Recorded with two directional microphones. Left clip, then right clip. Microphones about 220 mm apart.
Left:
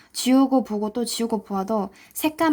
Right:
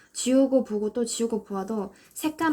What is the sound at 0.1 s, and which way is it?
Speech, 40° left (ahead or behind).